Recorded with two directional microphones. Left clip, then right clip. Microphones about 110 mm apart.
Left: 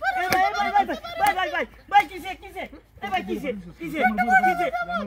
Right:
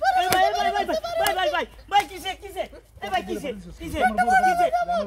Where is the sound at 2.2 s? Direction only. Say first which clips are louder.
Right 3 dB; 55° right (ahead or behind).